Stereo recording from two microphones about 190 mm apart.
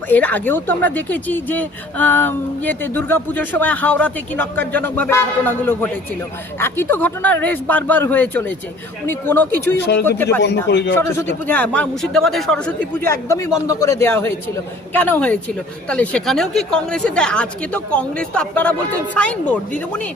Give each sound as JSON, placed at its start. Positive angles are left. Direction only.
{"t": 0.1, "sound": "speech", "side_deg": 10}
{"t": 9.7, "sound": "speech", "side_deg": 60}
{"t": 10.0, "sound": "speech", "side_deg": 10}
{"t": 10.7, "sound": "speech", "side_deg": 65}
{"t": 10.9, "sound": "a woman's voice", "side_deg": 15}